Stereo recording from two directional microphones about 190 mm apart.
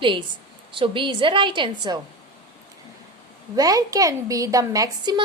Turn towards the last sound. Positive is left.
turn(degrees=-20)  # may be behind; listen again after turning